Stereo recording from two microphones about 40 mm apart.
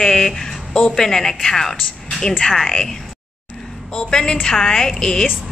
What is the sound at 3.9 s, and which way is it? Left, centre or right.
A woman's voice, left.